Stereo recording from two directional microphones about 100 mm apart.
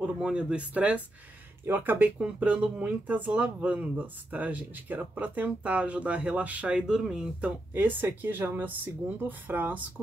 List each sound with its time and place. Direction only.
0.0 s speech: 10° right (ahead or behind)